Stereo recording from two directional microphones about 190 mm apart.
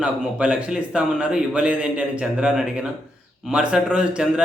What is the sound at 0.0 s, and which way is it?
A man's voice, 5° right (ahead or behind).